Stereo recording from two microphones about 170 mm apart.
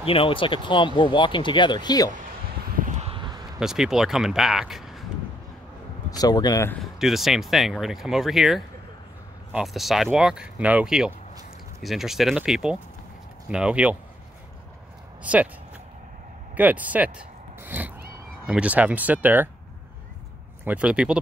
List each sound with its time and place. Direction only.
0.0 s speech: 35° left (ahead or behind)
2.9 s a sound: 35° right (ahead or behind)
3.5 s speech: 5° right (ahead or behind)
6.0 s speech: 20° left (ahead or behind)
6.7 s speech: centre (ahead or behind)
15.3 s speech: 10° right (ahead or behind)
16.5 s speech: 10° right (ahead or behind)
17.6 s cat: 10° right (ahead or behind)
18.5 s speech: 10° right (ahead or behind)
20.6 s speech: 5° right (ahead or behind)